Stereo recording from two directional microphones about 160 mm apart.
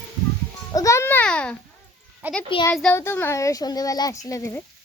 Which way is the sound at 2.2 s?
10° right (ahead or behind).